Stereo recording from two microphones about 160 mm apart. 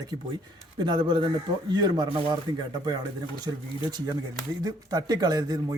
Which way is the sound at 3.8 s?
25° right (ahead or behind).